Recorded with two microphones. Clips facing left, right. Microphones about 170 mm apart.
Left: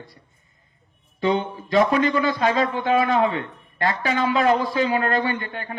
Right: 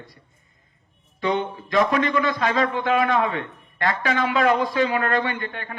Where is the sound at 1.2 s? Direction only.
30° left (ahead or behind).